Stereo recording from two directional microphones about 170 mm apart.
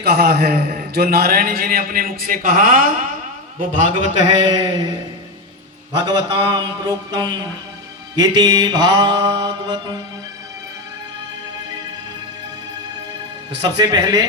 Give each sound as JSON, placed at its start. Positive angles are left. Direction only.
{"t": 0.0, "sound": "a man's voice", "side_deg": -65}
{"t": 6.1, "sound": "mantra", "side_deg": -25}
{"t": 13.6, "sound": "mantra", "side_deg": -25}